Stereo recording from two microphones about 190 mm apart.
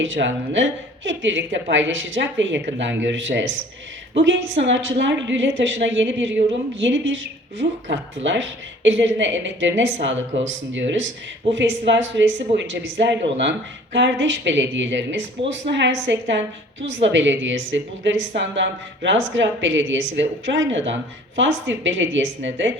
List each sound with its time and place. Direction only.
0.0 s a woman's voice: 80° right